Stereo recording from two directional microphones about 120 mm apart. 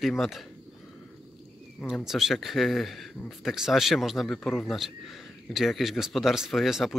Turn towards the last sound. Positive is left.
turn(degrees=0)  # may be behind; listen again after turning